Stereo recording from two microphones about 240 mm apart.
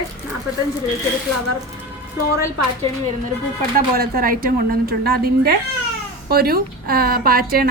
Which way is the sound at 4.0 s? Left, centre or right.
Right.